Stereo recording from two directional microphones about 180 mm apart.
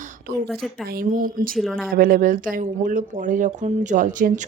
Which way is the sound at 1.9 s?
50° right (ahead or behind).